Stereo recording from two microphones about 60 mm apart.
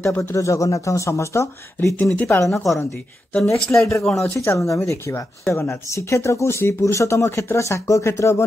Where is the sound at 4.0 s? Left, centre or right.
Centre.